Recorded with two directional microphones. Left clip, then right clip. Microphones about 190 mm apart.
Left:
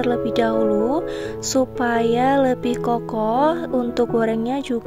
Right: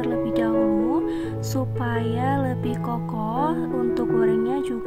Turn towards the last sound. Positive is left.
turn(degrees=30)  # may be behind; listen again after turning